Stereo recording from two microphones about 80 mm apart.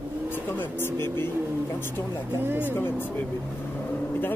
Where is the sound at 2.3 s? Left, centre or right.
Right.